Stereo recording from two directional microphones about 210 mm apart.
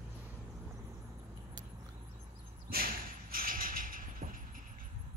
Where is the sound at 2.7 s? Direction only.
45° right (ahead or behind).